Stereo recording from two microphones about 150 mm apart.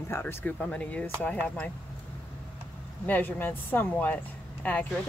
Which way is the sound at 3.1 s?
10° left (ahead or behind).